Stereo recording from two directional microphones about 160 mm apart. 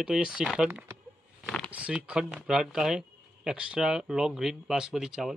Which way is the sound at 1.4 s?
5° left (ahead or behind).